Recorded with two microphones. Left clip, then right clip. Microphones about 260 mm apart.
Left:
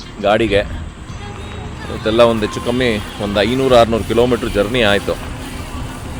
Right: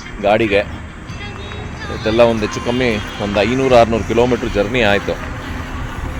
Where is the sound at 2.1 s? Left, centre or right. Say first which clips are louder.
Left 1 dB; centre.